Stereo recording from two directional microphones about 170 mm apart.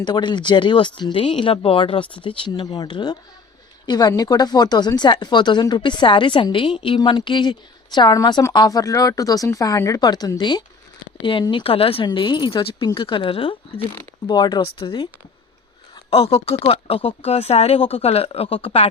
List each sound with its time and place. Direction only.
0.0 s speech: 25° left (ahead or behind)